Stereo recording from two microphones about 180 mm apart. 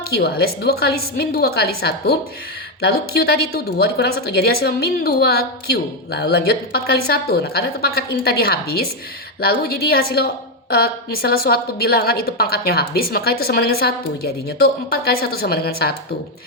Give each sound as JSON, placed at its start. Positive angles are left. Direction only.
{"t": 0.1, "sound": "speech", "side_deg": 60}